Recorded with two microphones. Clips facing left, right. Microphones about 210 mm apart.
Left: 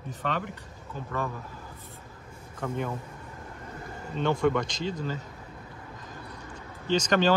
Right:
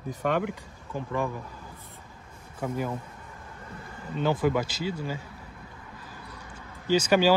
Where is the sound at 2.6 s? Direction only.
10° right (ahead or behind).